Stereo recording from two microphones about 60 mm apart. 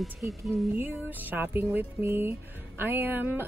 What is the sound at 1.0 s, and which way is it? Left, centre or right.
Speech, right.